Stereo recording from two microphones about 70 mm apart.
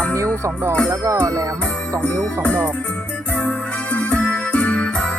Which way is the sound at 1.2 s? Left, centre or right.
Right.